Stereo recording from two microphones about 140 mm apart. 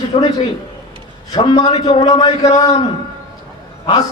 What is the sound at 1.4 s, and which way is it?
Speech, 35° left (ahead or behind).